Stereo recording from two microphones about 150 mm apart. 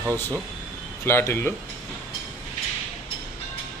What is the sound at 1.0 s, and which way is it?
Speech, 15° left (ahead or behind).